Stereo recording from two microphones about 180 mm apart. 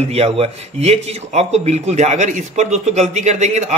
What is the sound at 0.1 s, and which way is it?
Speech, 35° right (ahead or behind).